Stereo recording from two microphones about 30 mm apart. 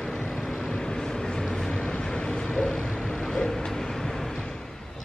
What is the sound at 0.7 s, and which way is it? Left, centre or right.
Vehicle, left.